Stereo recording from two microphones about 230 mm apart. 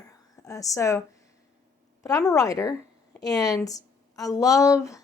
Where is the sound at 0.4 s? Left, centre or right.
Centre.